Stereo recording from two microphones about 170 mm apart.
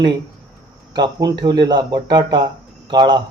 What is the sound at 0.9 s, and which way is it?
Speech, 25° right (ahead or behind).